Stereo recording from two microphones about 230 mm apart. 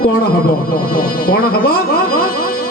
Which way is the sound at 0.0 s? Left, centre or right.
Left.